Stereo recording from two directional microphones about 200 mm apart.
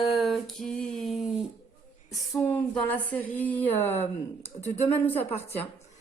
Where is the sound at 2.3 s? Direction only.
10° left (ahead or behind).